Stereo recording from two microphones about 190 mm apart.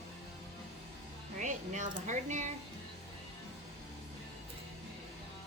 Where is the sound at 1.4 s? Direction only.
40° right (ahead or behind).